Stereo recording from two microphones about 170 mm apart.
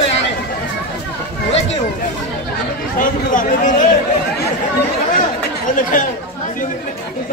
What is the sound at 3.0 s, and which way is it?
Speech, 50° left (ahead or behind).